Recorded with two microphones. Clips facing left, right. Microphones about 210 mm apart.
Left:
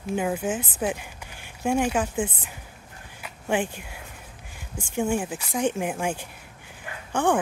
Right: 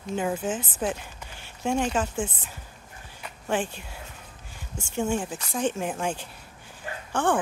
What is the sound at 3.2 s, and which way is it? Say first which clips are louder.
Speech: left 2 dB; 10° left (ahead or behind).